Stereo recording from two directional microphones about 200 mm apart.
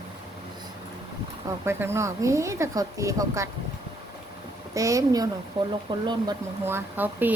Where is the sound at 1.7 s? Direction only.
10° right (ahead or behind).